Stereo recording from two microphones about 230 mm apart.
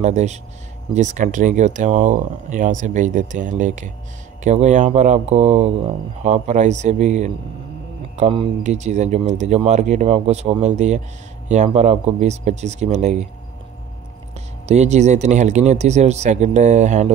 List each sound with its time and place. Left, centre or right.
0.0 s speech: right
14.7 s speech: right